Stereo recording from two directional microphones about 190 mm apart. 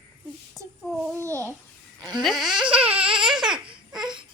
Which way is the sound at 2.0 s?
20° right (ahead or behind).